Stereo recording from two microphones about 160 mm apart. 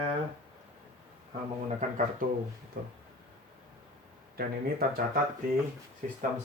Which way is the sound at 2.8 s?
70° right (ahead or behind).